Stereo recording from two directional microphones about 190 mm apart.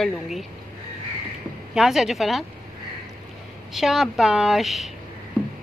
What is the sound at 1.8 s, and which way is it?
Speech, centre (ahead or behind).